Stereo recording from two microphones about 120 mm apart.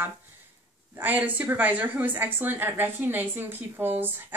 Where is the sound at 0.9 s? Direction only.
15° right (ahead or behind).